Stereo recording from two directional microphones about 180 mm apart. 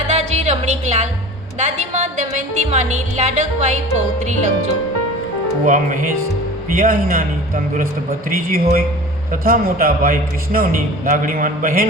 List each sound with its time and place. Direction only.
0.1 s music: 40° right (ahead or behind)
5.6 s a man's voice: 45° right (ahead or behind)